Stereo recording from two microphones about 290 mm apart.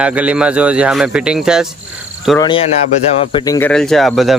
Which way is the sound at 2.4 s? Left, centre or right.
Centre.